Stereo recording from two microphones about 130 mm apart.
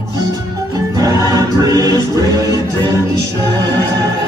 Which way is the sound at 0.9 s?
25° right (ahead or behind).